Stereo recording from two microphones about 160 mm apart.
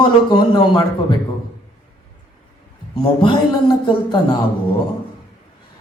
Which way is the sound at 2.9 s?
30° left (ahead or behind).